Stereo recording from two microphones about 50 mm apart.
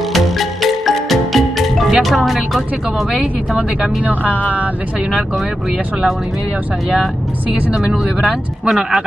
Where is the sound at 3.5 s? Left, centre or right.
Right.